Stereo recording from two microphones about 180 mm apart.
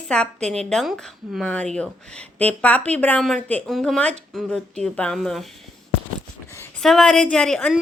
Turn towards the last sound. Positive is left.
turn(degrees=5)  # may be behind; listen again after turning